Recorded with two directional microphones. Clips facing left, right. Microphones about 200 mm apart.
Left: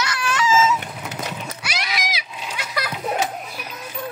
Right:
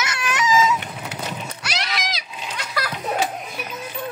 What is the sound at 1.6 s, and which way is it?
Splash, centre (ahead or behind).